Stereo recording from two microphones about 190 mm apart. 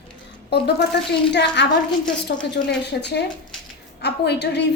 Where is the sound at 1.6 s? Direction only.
65° left (ahead or behind).